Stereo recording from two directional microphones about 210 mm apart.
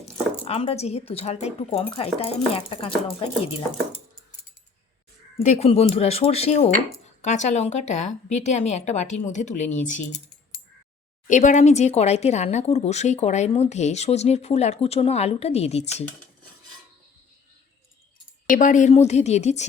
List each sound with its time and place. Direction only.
0.4 s speech: 30° left (ahead or behind)
5.4 s speech: 30° left (ahead or behind)
11.3 s speech: 35° left (ahead or behind)
18.5 s speech: 35° left (ahead or behind)